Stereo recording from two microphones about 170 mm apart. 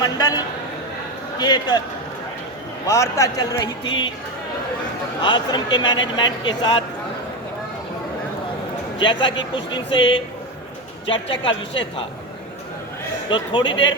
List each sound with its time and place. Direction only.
0.0 s a man's voice: 25° left (ahead or behind)
2.8 s a man's voice: 20° left (ahead or behind)
5.2 s a man's voice: 25° left (ahead or behind)
9.0 s a man's voice: 30° left (ahead or behind)
11.0 s a man's voice: 30° left (ahead or behind)
13.3 s a man's voice: 30° left (ahead or behind)